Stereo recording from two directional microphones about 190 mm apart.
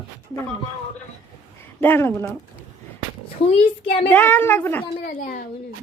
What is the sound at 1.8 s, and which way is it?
Speech, 10° left (ahead or behind).